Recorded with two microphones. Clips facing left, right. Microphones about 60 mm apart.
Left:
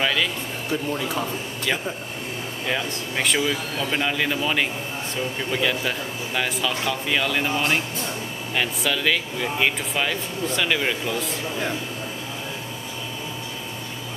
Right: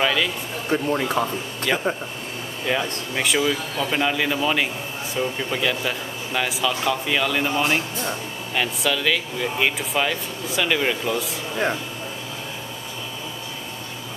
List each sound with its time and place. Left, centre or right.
0.0 s a sound: centre
0.7 s speech: right
1.7 s speech: centre